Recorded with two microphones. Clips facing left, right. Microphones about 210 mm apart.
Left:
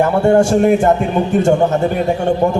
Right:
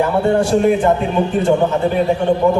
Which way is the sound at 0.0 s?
45° left (ahead or behind).